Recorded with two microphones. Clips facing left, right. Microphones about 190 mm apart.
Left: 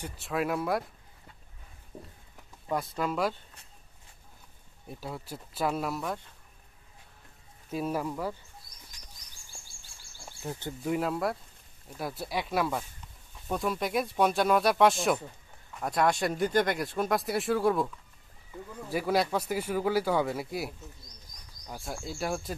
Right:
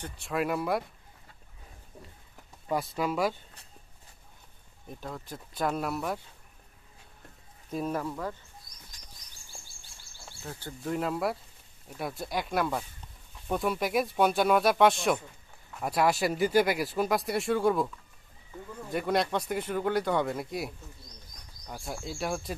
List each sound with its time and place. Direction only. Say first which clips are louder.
0.0 s speech: even; centre (ahead or behind)
2.7 s speech: right 1 dB; 5° right (ahead or behind)
4.8 s speech: left 1 dB; 10° left (ahead or behind)
7.7 s speech: even; 10° left (ahead or behind)
10.1 s a sound: left 4 dB; 20° left (ahead or behind)
10.9 s speech: left 1 dB; centre (ahead or behind)
18.9 s speech: left 1 dB; 5° left (ahead or behind)